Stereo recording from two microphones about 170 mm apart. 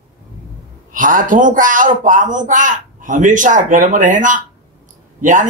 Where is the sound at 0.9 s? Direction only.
50° right (ahead or behind).